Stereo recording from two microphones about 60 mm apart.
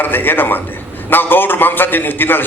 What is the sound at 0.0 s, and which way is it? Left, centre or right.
A man's voice, left.